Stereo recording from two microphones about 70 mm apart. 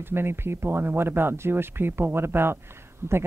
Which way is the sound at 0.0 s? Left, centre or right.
Right.